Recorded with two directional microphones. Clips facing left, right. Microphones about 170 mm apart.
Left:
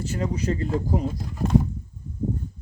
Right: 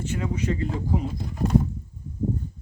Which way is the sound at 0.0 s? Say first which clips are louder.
Left 1 dB; 40° left (ahead or behind).